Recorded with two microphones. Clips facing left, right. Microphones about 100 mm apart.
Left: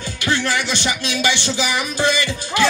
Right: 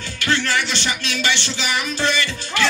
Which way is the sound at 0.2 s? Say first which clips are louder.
Even; 15° left (ahead or behind).